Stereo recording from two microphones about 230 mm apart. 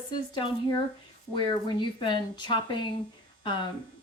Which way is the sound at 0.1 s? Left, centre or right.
Centre.